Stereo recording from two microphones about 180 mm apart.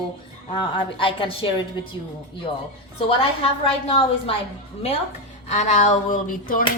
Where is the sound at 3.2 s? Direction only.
30° left (ahead or behind).